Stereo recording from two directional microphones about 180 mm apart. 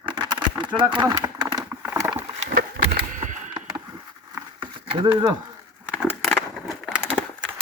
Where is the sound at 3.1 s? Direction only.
45° right (ahead or behind).